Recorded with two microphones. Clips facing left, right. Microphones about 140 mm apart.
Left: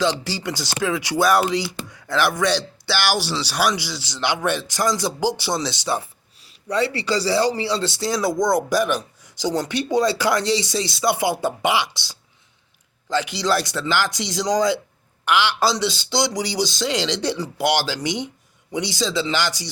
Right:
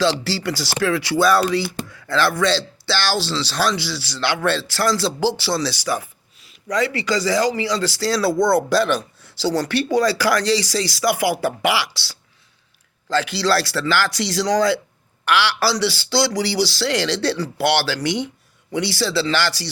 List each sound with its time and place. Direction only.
0.0 s a man's voice: 15° left (ahead or behind)